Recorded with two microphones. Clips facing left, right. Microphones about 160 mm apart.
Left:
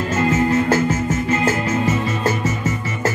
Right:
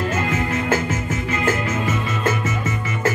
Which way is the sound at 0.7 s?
40° left (ahead or behind).